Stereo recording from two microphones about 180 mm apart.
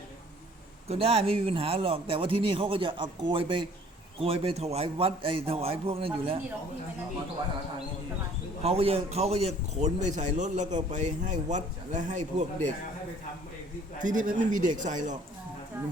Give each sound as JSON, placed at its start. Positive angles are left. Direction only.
{"t": 0.9, "sound": "a man's voice", "side_deg": -30}
{"t": 8.6, "sound": "a man's voice", "side_deg": -35}
{"t": 14.0, "sound": "speech", "side_deg": -45}
{"t": 15.7, "sound": "a sound", "side_deg": -10}